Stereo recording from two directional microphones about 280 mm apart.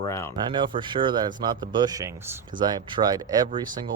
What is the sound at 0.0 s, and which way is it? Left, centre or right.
Speech, centre.